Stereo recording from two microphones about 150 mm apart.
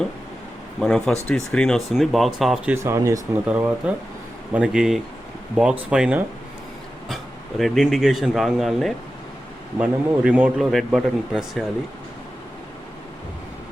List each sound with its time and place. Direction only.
0.8 s a man's voice: 5° left (ahead or behind)
2.7 s speech: 20° right (ahead or behind)
3.4 s a man's voice: 10° right (ahead or behind)
7.6 s a man's voice: centre (ahead or behind)